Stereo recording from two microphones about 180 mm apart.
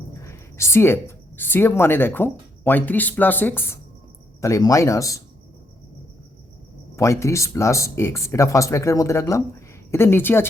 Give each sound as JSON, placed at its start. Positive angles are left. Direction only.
{"t": 0.2, "sound": "speech", "side_deg": 15}
{"t": 6.9, "sound": "speech", "side_deg": 15}